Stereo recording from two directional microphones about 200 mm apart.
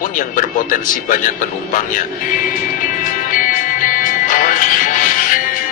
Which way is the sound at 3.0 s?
40° left (ahead or behind).